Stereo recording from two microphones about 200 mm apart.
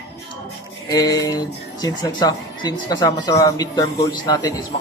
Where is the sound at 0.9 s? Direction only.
20° left (ahead or behind).